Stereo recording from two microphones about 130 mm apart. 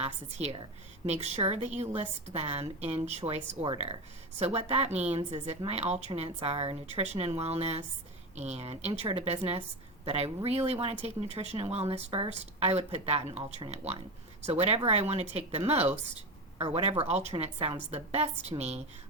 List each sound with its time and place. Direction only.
0.0 s a woman's voice: 55° right (ahead or behind)
17.0 s a woman's voice: 55° right (ahead or behind)
17.3 s a woman's voice: 45° right (ahead or behind)